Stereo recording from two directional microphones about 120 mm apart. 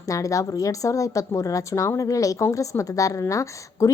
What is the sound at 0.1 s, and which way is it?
Speech, 25° left (ahead or behind).